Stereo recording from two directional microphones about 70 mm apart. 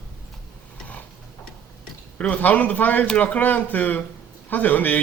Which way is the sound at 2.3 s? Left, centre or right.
Left.